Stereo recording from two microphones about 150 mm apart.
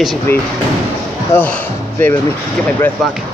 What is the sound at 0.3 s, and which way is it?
Speech, 15° left (ahead or behind).